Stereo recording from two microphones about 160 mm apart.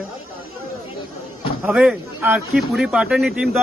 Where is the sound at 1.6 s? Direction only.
5° right (ahead or behind).